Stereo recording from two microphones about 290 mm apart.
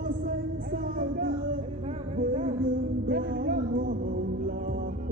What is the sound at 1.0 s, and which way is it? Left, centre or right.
Music, right.